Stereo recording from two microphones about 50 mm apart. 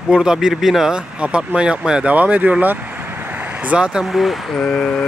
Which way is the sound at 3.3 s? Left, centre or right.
Right.